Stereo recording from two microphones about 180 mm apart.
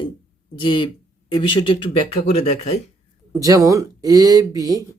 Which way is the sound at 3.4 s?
20° right (ahead or behind).